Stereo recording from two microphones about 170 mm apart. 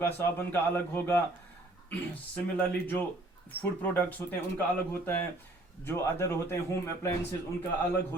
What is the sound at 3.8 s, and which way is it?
Speech, 10° left (ahead or behind).